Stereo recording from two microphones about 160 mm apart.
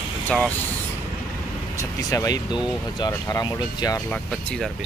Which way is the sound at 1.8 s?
20° left (ahead or behind).